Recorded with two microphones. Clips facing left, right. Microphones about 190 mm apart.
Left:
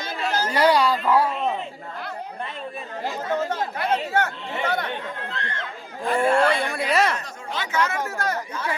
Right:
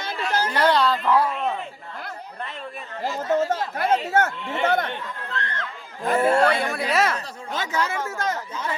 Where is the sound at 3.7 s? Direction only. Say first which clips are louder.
Right 3 dB; 45° right (ahead or behind).